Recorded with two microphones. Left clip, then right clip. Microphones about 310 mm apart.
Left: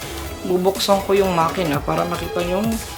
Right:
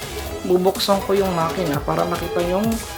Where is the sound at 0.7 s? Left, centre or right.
Centre.